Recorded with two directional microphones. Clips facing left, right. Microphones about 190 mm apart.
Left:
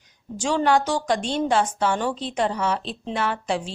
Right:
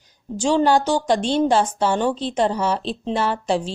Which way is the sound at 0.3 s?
30° right (ahead or behind).